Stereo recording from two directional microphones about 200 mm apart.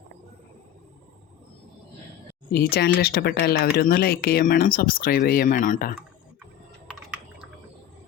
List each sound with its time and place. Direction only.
2.5 s speech: 50° left (ahead or behind)